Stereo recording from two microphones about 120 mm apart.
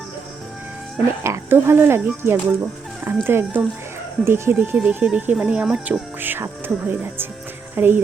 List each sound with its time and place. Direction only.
1.2 s speech: 20° right (ahead or behind)
4.8 s speech: 10° right (ahead or behind)